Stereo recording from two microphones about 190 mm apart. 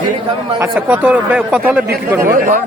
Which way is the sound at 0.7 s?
5° right (ahead or behind).